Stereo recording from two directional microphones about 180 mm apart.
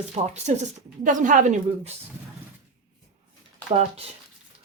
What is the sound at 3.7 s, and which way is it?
Speech, 35° right (ahead or behind).